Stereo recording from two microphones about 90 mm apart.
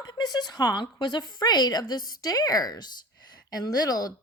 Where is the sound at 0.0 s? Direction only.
50° left (ahead or behind).